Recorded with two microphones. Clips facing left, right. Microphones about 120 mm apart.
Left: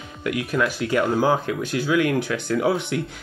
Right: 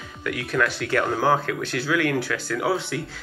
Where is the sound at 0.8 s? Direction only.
15° left (ahead or behind).